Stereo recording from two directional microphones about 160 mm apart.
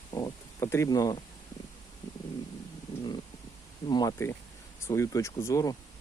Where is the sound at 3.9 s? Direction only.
25° left (ahead or behind).